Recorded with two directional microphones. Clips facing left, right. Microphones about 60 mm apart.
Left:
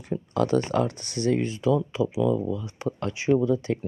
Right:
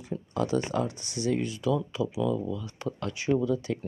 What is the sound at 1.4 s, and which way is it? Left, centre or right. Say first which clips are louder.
Speech: left 4 dB; left.